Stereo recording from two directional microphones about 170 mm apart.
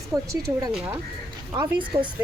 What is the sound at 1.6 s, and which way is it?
Speech, 25° right (ahead or behind).